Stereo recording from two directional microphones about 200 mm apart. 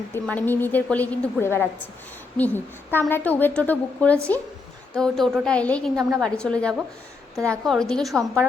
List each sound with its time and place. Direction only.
0.1 s a woman's voice: 10° left (ahead or behind)